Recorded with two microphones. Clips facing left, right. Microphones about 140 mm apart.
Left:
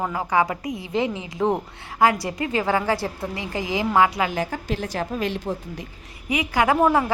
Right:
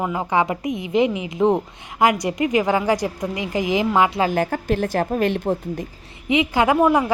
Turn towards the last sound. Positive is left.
turn(degrees=-15)  # may be behind; listen again after turning